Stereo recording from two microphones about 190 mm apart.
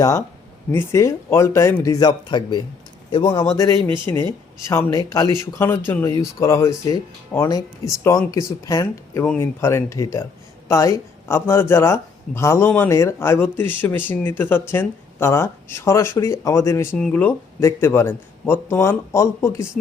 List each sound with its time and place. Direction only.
0.0 s speech: 15° left (ahead or behind)
3.6 s speech: 15° left (ahead or behind)